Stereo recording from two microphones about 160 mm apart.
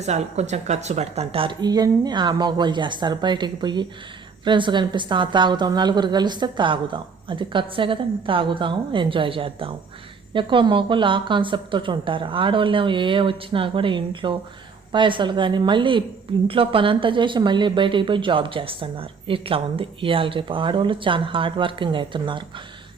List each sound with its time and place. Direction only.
0.0 s a woman's voice: 45° right (ahead or behind)